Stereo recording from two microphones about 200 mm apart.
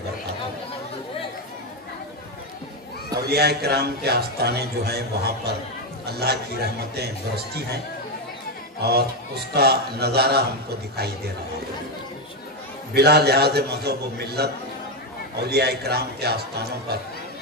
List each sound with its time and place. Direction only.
3.2 s a man's voice: 55° right (ahead or behind)
8.8 s a man's voice: 55° right (ahead or behind)
12.9 s a man's voice: 55° right (ahead or behind)